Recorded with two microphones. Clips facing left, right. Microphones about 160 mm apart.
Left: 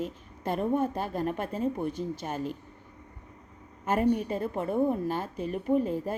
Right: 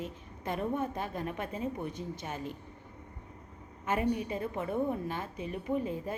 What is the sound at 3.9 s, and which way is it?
A woman's voice, 50° left (ahead or behind).